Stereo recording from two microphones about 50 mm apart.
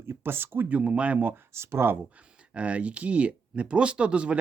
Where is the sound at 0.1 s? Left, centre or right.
Right.